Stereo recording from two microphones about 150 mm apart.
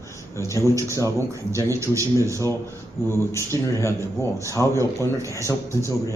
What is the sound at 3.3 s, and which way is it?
A man's voice, 15° left (ahead or behind).